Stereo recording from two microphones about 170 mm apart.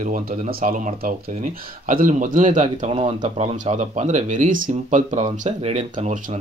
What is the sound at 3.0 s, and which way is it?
Speech, 35° right (ahead or behind).